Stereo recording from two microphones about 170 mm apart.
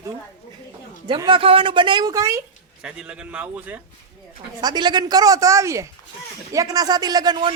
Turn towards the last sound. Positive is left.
turn(degrees=-25)  # may be behind; listen again after turning